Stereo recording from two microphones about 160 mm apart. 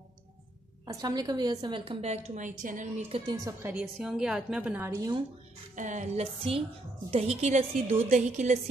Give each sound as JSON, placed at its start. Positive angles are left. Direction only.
{"t": 0.8, "sound": "a woman's voice", "side_deg": -25}
{"t": 3.4, "sound": "a woman's voice", "side_deg": -15}
{"t": 3.8, "sound": "a woman's voice", "side_deg": -5}
{"t": 5.8, "sound": "a woman's voice", "side_deg": -50}